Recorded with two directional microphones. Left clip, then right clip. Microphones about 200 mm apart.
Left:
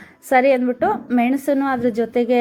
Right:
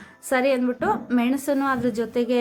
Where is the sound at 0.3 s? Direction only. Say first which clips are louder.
Left 6 dB; 15° left (ahead or behind).